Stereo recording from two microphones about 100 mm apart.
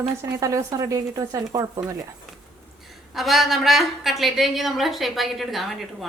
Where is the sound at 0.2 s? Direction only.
30° right (ahead or behind).